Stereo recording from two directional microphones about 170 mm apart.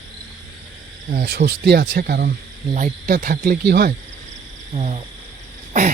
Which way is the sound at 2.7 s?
50° right (ahead or behind).